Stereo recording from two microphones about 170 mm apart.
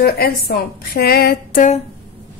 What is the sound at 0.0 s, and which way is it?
A woman's voice, 65° left (ahead or behind).